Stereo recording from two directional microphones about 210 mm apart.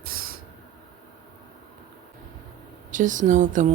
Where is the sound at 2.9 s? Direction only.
40° right (ahead or behind).